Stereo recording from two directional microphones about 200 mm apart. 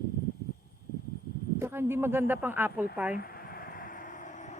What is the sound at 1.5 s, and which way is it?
Speech, 10° right (ahead or behind).